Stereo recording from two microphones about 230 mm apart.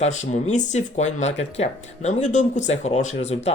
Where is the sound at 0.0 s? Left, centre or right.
Left.